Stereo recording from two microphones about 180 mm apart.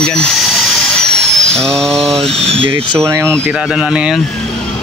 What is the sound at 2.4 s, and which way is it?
Speech, 35° right (ahead or behind).